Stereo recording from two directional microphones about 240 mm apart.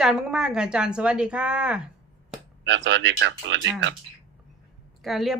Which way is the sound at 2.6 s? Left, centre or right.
Right.